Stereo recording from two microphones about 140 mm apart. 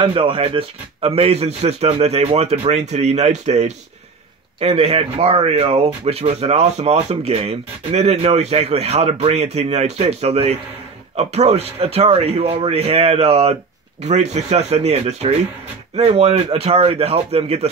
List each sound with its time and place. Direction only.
0.0 s speech: 40° right (ahead or behind)